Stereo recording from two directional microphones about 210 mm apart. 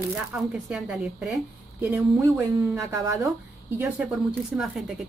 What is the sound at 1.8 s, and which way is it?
Speech, 15° right (ahead or behind).